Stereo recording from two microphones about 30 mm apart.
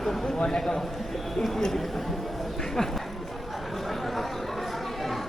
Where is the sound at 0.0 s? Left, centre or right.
Centre.